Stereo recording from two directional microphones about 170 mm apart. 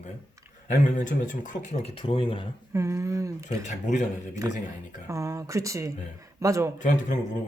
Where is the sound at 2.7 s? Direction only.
15° right (ahead or behind).